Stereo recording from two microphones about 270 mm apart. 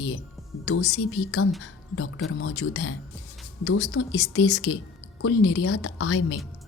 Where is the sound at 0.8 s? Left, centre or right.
Left.